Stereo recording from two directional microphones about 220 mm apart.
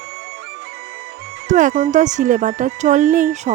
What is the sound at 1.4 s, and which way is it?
Speech, 35° right (ahead or behind).